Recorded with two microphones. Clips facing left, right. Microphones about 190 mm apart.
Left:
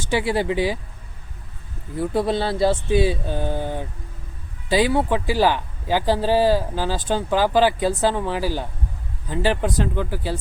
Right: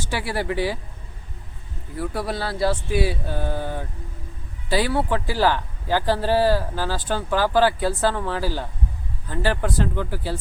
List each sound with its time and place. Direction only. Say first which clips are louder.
0.1 s speech: left 5 dB; 20° left (ahead or behind)
2.0 s speech: left 6 dB; 25° left (ahead or behind)